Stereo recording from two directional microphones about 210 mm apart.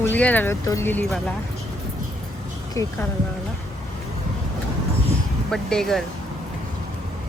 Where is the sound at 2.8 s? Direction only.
15° left (ahead or behind).